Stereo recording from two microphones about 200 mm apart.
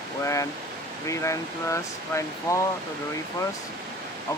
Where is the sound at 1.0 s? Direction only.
15° left (ahead or behind).